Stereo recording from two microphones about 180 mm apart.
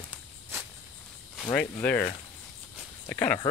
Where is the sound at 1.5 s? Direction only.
10° left (ahead or behind).